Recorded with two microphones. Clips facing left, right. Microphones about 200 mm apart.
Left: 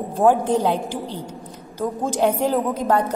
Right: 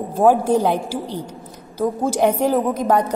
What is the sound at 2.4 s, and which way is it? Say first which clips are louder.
Speech: right 2 dB; 15° right (ahead or behind).